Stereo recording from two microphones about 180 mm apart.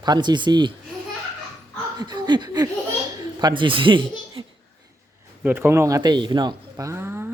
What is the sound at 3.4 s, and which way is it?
Speech, 25° right (ahead or behind).